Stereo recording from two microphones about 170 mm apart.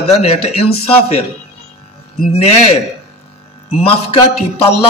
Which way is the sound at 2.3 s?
40° left (ahead or behind).